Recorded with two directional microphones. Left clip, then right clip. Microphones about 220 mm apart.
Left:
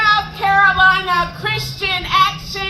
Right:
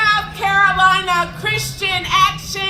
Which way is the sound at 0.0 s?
25° right (ahead or behind).